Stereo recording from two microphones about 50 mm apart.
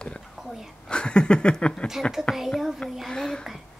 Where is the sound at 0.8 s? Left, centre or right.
Centre.